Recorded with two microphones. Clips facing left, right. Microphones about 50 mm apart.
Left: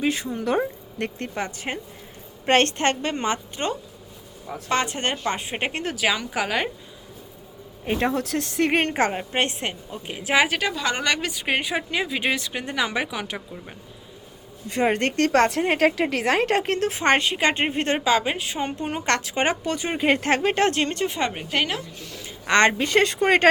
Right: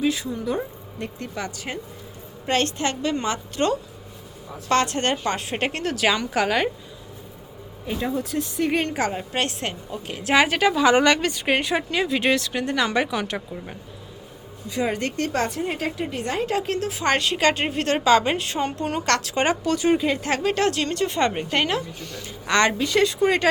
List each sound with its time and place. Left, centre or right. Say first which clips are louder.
0.0 s a woman's voice: right 1 dB; left
0.4 s a woman's voice: left 6 dB; left
1.4 s speech: left 1 dB; left
2.5 s a woman's voice: left 4 dB; left; by 6.7 s centre
7.9 s speech: left 4 dB; left
8.1 s speech: left 1 dB; left
8.7 s a woman's voice: left 2 dB; left; by 13.7 s centre
14.7 s a woman's voice: left 3 dB; left
17.2 s a woman's voice: right 1 dB; centre
18.0 s a woman's voice: right 3 dB; centre
18.6 s speech: even; centre
20.0 s a woman's voice: left 3 dB; left
21.1 s a woman's voice: right 3 dB; centre
22.4 s a woman's voice: left 2 dB; left